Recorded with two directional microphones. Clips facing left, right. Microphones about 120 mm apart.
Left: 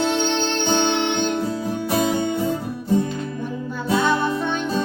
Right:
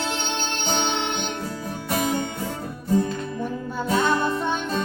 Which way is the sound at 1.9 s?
30° left (ahead or behind).